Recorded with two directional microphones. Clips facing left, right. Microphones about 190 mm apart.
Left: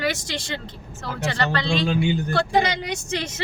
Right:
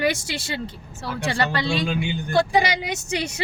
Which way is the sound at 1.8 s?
35° left (ahead or behind).